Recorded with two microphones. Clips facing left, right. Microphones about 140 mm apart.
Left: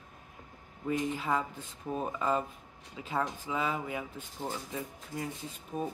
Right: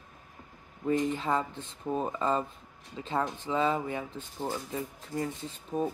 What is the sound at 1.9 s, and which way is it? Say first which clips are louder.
Speech: right 3 dB; 30° right (ahead or behind).